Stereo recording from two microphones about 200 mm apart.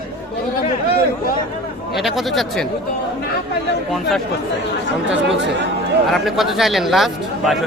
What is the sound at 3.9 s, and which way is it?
Speech, centre (ahead or behind).